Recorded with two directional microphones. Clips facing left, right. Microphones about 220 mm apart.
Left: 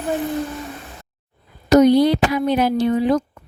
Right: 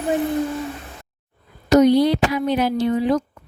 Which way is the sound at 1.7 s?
50° left (ahead or behind).